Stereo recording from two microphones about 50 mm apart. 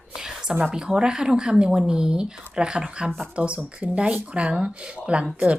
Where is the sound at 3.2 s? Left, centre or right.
Right.